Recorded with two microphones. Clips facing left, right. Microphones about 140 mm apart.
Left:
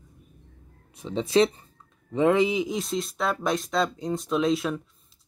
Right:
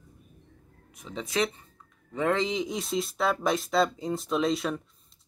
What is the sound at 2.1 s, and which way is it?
Speech, 15° left (ahead or behind).